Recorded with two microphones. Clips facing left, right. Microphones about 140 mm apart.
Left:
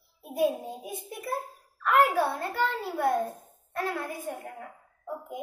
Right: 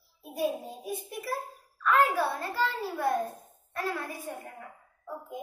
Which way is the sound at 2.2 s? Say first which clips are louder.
Left 2 dB; 20° left (ahead or behind).